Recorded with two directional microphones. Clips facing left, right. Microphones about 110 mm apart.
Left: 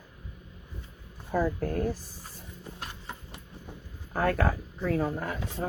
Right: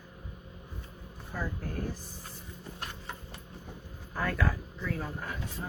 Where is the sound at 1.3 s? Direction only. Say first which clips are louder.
Left 9 dB; 55° left (ahead or behind).